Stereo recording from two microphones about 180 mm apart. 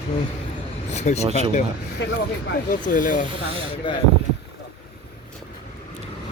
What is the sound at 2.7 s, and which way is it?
Speech, 45° left (ahead or behind).